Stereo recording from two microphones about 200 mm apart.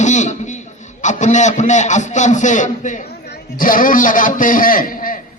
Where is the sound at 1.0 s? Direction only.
35° left (ahead or behind).